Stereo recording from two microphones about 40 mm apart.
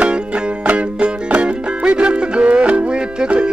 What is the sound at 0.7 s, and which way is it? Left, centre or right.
Music, right.